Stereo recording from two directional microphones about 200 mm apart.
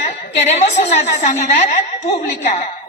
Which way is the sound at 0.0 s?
35° left (ahead or behind).